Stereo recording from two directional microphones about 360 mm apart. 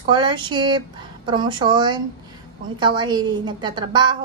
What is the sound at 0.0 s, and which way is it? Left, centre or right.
A woman's voice, centre.